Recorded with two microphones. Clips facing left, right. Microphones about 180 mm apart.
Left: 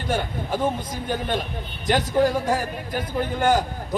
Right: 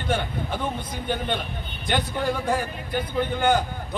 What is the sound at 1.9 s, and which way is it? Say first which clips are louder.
A man's voice: left 5 dB; 40° left (ahead or behind).